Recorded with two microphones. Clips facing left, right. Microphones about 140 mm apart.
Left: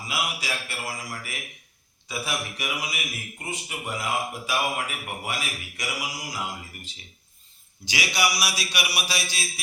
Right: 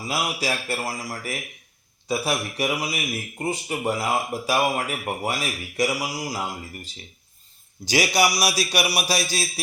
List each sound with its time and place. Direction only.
0.0 s a man's voice: 35° right (ahead or behind)